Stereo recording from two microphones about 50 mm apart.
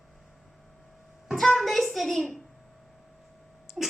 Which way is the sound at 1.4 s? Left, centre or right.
Centre.